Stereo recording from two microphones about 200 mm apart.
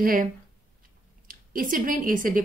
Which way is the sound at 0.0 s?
45° right (ahead or behind).